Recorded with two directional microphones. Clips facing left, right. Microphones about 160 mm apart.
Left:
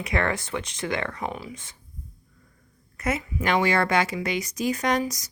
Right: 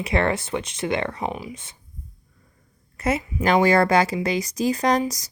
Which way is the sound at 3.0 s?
30° right (ahead or behind).